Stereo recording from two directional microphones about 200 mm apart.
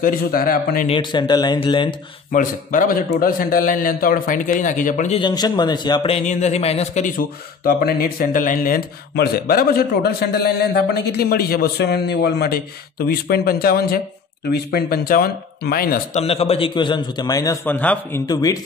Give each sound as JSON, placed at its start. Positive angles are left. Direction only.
{"t": 0.0, "sound": "a man's voice", "side_deg": 45}
{"t": 0.8, "sound": "a man's voice", "side_deg": 25}
{"t": 2.3, "sound": "a man's voice", "side_deg": 40}
{"t": 5.2, "sound": "a man's voice", "side_deg": 20}
{"t": 16.2, "sound": "a man's voice", "side_deg": 30}
{"t": 18.2, "sound": "a man's voice", "side_deg": 20}